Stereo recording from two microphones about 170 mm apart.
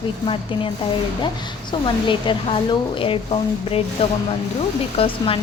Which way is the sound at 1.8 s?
30° left (ahead or behind).